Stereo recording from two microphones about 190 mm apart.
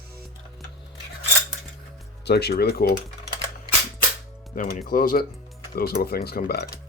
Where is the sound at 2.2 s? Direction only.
60° left (ahead or behind).